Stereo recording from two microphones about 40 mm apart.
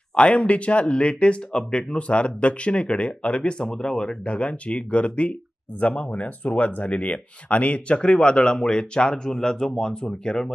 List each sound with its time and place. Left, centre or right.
0.1 s speech: left
3.6 s speech: centre
4.3 s speech: left